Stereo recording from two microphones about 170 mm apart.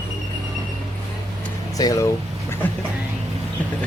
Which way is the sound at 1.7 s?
20° left (ahead or behind).